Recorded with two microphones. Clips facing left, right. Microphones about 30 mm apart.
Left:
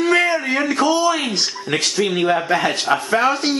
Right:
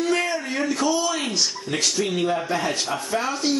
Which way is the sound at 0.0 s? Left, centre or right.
Left.